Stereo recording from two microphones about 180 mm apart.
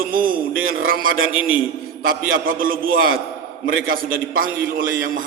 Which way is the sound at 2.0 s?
55° right (ahead or behind).